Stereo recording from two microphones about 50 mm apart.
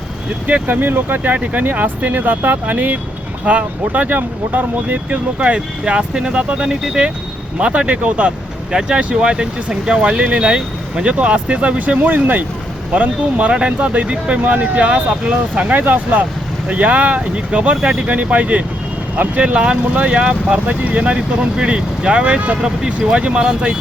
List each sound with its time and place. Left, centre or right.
0.4 s speech: right
0.8 s speech: right
12.0 s speech: right
12.9 s speech: right
15.2 s speech: right
15.7 s speech: right